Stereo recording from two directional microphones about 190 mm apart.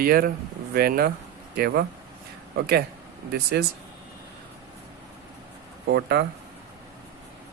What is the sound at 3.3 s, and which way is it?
Speech, 55° right (ahead or behind).